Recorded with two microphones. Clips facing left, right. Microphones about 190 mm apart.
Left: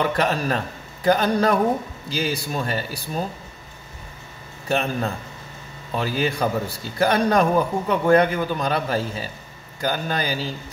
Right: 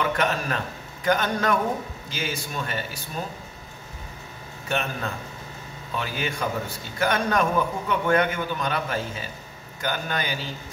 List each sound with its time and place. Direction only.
0.0 s a man's voice: 35° left (ahead or behind)
4.6 s a man's voice: 35° left (ahead or behind)